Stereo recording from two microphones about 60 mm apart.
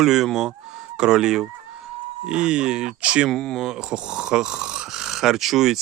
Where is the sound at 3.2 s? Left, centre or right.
Centre.